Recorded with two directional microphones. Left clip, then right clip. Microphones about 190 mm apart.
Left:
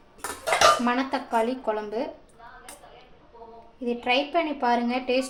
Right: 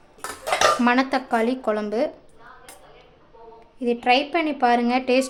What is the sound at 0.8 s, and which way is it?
Speech, 60° right (ahead or behind).